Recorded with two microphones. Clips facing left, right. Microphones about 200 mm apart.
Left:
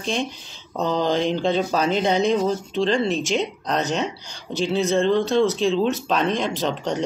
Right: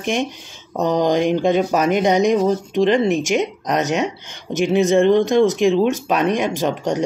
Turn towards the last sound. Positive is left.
turn(degrees=-15)  # may be behind; listen again after turning